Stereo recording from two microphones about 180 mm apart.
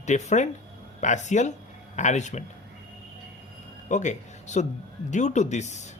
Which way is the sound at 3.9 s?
40° left (ahead or behind).